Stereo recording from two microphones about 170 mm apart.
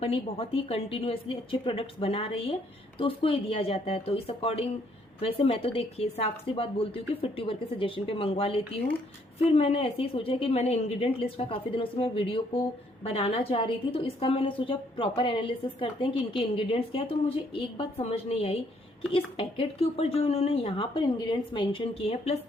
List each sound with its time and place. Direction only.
0.0 s a woman's voice: 35° left (ahead or behind)